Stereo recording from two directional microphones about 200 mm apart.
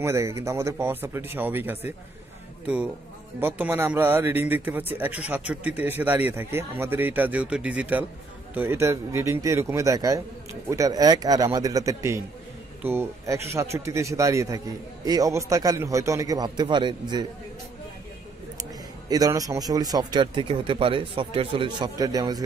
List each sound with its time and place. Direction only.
0.0 s a man's voice: 15° right (ahead or behind)
18.6 s a man's voice: 20° right (ahead or behind)